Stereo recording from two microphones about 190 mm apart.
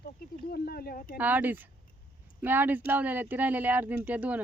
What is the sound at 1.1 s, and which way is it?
Speech, 10° right (ahead or behind).